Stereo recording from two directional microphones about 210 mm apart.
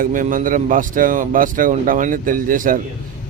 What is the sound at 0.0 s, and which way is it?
A man's voice, 40° right (ahead or behind).